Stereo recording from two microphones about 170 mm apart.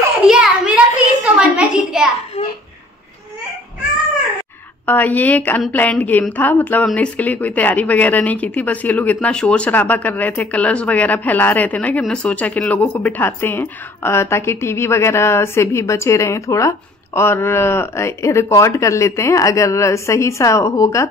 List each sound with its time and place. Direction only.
0.3 s a sound: 5° right (ahead or behind)
2.4 s laughter: 35° left (ahead or behind)
4.8 s speech: 10° left (ahead or behind)